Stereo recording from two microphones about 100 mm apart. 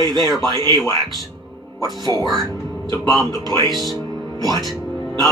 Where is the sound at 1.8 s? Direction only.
40° right (ahead or behind).